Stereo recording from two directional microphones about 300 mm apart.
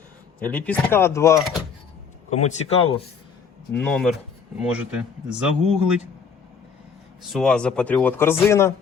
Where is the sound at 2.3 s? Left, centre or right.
Left.